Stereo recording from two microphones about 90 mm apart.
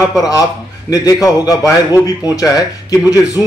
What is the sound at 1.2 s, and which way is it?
Speech, 40° left (ahead or behind).